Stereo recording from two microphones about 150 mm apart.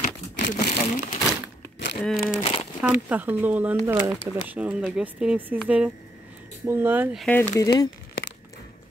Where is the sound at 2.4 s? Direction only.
40° left (ahead or behind).